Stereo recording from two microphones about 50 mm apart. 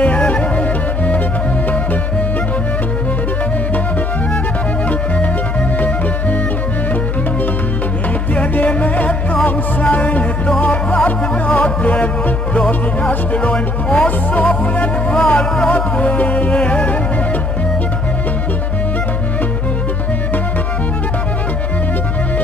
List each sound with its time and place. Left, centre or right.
0.0 s music: left
8.4 s music: left
12.5 s speech: centre